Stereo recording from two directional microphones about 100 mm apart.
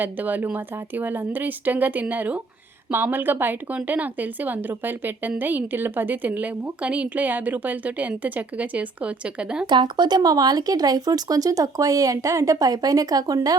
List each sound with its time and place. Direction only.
0.0 s a woman's voice: 15° right (ahead or behind)
9.6 s speech: 50° right (ahead or behind)